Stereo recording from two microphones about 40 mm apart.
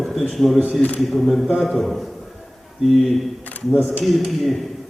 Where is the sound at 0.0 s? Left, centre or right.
Centre.